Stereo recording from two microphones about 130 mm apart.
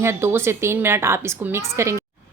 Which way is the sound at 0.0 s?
20° right (ahead or behind).